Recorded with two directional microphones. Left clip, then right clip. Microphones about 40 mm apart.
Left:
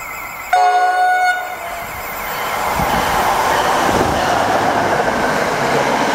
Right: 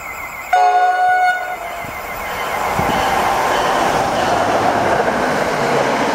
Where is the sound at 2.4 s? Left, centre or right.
Centre.